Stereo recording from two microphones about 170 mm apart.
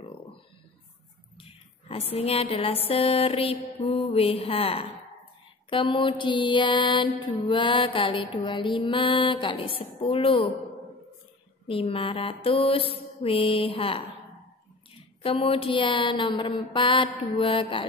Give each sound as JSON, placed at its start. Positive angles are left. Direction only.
{"t": 1.4, "sound": "a sound", "side_deg": 35}
{"t": 2.9, "sound": "mantra", "side_deg": 30}
{"t": 11.6, "sound": "mantra", "side_deg": 30}
{"t": 15.2, "sound": "mantra", "side_deg": 35}